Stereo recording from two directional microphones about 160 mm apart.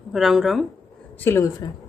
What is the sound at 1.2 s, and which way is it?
Speech, 15° left (ahead or behind).